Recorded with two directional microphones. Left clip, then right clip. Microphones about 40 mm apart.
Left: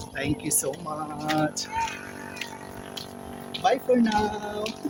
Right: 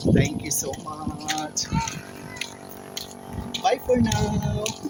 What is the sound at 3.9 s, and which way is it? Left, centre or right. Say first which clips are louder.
Speech: right 1 dB; centre.